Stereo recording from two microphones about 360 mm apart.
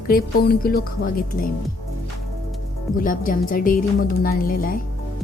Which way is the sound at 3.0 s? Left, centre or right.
Left.